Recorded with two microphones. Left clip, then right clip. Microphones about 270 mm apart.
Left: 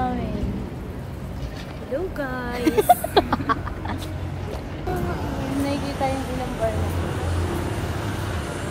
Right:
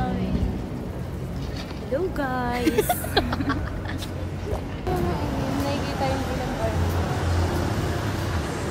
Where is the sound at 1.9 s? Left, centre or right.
Centre.